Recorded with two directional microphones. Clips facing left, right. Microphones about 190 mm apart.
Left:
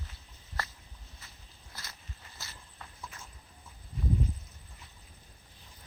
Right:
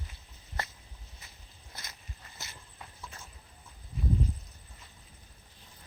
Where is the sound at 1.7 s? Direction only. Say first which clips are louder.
Even; 20° right (ahead or behind).